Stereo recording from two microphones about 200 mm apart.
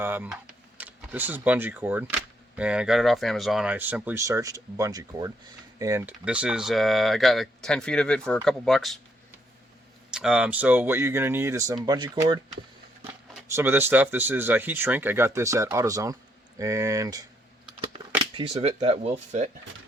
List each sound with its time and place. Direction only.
0.0 s speech: 10° right (ahead or behind)
10.1 s speech: 5° right (ahead or behind); by 12.4 s 20° right (ahead or behind)
13.6 s speech: 10° right (ahead or behind)
18.3 s speech: 30° right (ahead or behind)